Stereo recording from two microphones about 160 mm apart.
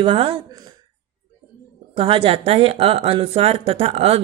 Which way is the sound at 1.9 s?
35° right (ahead or behind).